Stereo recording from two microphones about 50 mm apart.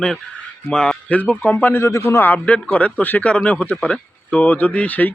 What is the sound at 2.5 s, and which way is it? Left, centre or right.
Speech, left.